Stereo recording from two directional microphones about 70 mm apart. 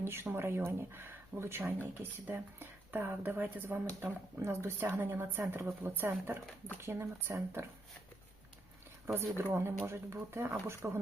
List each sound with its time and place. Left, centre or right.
0.0 s speech: right
4.0 s speech: right
9.4 s speech: right